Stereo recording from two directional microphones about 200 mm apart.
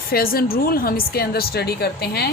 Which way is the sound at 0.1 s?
50° left (ahead or behind).